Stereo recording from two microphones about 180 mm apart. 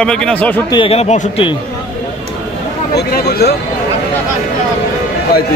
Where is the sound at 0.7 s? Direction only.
30° left (ahead or behind).